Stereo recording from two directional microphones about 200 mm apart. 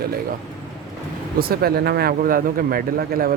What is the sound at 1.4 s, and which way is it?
Speech, 50° right (ahead or behind).